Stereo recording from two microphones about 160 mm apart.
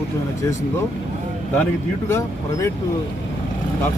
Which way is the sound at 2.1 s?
15° left (ahead or behind).